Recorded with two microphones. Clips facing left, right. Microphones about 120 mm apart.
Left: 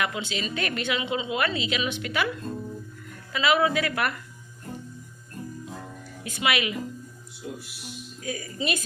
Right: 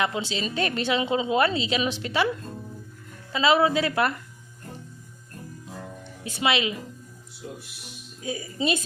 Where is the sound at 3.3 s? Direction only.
30° right (ahead or behind).